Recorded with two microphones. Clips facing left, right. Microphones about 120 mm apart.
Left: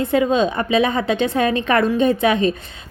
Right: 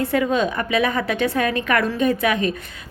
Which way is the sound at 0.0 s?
20° left (ahead or behind).